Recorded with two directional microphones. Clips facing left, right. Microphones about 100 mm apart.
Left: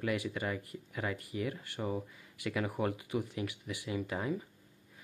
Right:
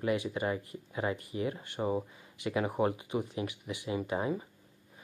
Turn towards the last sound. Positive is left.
turn(degrees=-25)  # may be behind; listen again after turning